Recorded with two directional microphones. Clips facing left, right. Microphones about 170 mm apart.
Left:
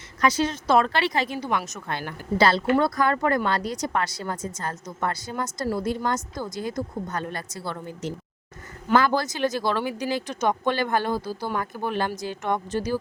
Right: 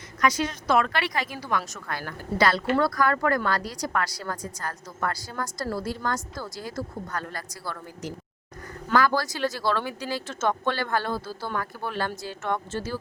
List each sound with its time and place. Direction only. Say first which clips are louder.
0.2 s a woman's voice: left 2 dB; 30° left (ahead or behind)